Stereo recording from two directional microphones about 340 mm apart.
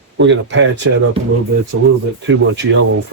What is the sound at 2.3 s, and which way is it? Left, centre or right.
Speech, right.